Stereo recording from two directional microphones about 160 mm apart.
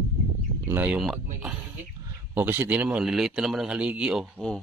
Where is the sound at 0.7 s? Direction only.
10° right (ahead or behind).